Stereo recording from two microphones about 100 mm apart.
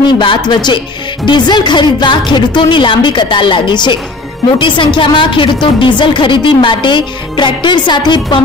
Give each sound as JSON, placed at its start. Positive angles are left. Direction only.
{"t": 0.0, "sound": "a woman's voice", "side_deg": 55}